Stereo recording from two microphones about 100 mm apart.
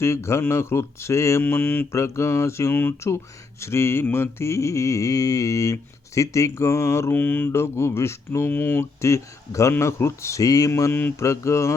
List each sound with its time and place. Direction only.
0.0 s mantra: 25° left (ahead or behind)